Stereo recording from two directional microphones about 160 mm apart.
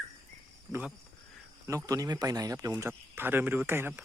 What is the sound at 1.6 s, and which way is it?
Speech, 20° right (ahead or behind).